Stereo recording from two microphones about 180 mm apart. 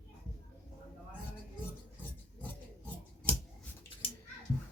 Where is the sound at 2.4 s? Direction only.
10° left (ahead or behind).